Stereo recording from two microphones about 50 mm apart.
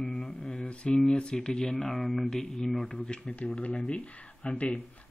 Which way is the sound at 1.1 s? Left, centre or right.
Centre.